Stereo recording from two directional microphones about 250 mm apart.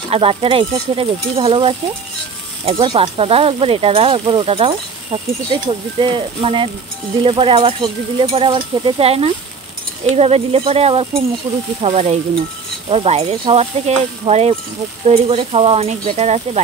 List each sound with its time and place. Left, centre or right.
0.1 s speech: right
11.4 s speech: centre
11.8 s speech: right